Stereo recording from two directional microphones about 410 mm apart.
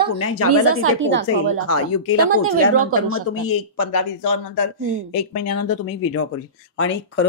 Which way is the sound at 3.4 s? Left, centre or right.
Left.